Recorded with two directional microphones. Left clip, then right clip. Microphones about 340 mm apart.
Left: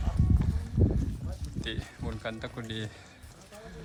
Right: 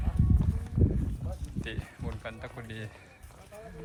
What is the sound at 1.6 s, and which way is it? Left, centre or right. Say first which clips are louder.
Speech: left 3 dB; centre.